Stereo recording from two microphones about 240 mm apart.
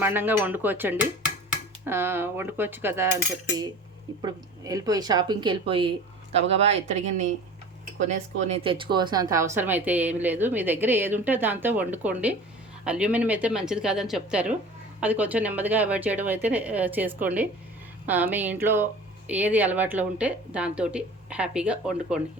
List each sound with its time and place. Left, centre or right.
0.0 s a woman's voice: centre
4.2 s a woman's voice: centre